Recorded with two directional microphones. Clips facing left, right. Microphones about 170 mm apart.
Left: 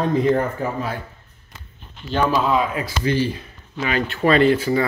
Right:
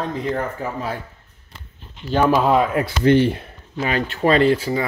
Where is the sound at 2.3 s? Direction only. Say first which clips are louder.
Right 3 dB; 55° right (ahead or behind).